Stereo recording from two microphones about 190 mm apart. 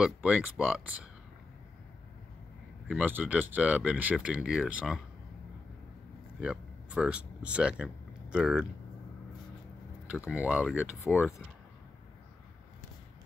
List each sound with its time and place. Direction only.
0.0 s speech: 5° right (ahead or behind)
2.9 s speech: 10° right (ahead or behind)
6.4 s speech: 5° right (ahead or behind)
10.0 s speech: 5° right (ahead or behind)